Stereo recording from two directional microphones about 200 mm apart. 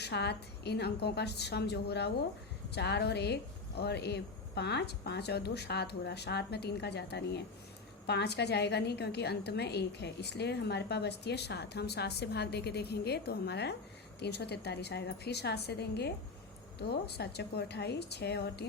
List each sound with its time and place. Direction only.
0.0 s a woman's voice: 55° left (ahead or behind)